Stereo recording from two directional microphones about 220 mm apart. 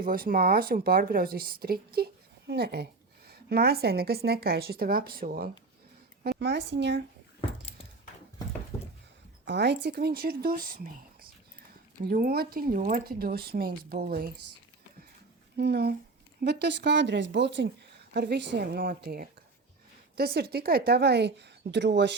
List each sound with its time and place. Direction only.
0.0 s a woman's voice: 40° right (ahead or behind)
9.5 s a woman's voice: 50° right (ahead or behind)
15.5 s a woman's voice: 50° right (ahead or behind)